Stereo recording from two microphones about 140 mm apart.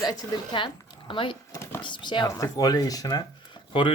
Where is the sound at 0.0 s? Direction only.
25° left (ahead or behind).